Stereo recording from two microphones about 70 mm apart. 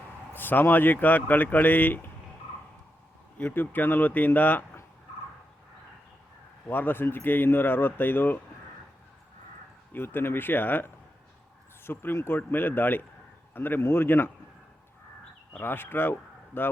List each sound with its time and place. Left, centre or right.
0.3 s speech: left
3.3 s speech: left
6.7 s speech: left
9.9 s speech: left
15.5 s speech: left